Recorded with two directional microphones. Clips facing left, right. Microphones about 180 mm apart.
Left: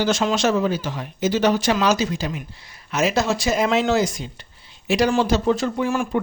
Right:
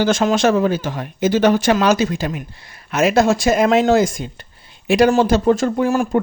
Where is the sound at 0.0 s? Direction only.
50° right (ahead or behind).